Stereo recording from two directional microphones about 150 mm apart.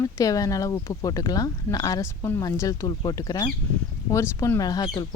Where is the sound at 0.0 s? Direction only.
20° left (ahead or behind).